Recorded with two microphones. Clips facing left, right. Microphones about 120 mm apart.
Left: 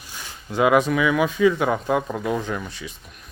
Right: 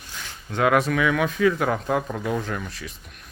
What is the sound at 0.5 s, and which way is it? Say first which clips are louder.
Speech: left 2 dB; 5° left (ahead or behind).